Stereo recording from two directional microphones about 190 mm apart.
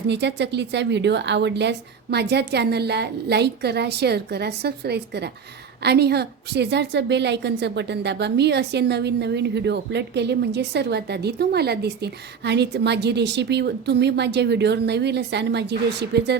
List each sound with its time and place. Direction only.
0.1 s a woman's voice: 65° right (ahead or behind)